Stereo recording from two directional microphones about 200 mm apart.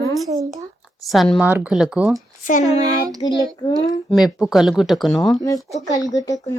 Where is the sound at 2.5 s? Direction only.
40° left (ahead or behind).